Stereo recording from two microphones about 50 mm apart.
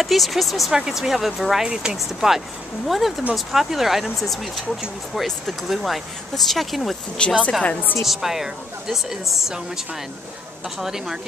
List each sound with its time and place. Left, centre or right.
0.0 s speech: centre
7.2 s a woman's voice: centre
7.6 s a woman's voice: left
8.0 s speech: centre
10.8 s speech: centre